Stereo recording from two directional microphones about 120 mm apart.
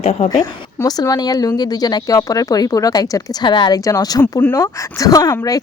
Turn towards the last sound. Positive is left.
turn(degrees=30)  # may be behind; listen again after turning